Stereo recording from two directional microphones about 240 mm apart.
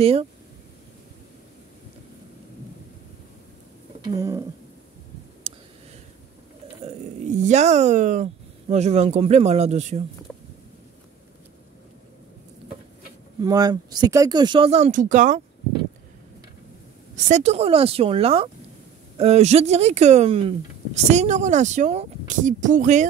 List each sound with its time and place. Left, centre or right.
0.0 s speech: right
4.0 s speech: centre
5.4 s a sound: right
6.8 s speech: right
13.4 s speech: centre
17.1 s speech: right